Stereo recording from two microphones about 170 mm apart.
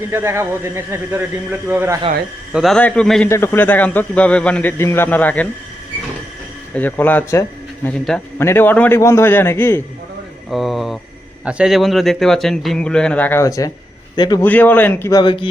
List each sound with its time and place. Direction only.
0.1 s speech: 15° right (ahead or behind)
2.5 s a man's voice: centre (ahead or behind)
3.2 s a man's voice: 15° left (ahead or behind)
6.7 s a man's voice: 10° left (ahead or behind)
10.5 s a man's voice: centre (ahead or behind)
15.2 s speech: 30° left (ahead or behind)